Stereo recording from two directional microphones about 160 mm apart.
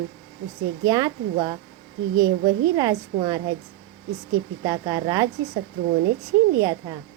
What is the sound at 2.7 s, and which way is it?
Speech, 25° right (ahead or behind).